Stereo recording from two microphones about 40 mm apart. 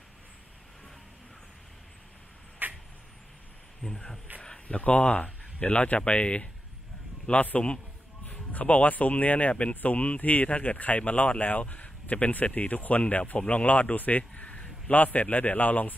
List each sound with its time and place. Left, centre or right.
2.6 s a sound: right
3.8 s speech: centre
4.4 s speech: left
8.3 s a man's voice: left